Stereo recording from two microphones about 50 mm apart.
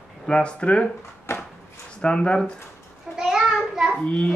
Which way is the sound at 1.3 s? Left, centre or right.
Left.